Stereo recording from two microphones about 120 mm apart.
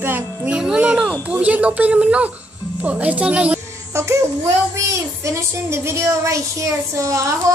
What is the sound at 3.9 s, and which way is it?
A child's voice, 25° right (ahead or behind).